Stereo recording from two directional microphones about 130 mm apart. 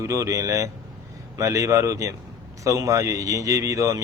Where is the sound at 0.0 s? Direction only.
25° right (ahead or behind).